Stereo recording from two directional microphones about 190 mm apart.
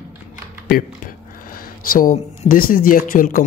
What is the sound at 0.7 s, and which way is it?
Speech, 50° left (ahead or behind).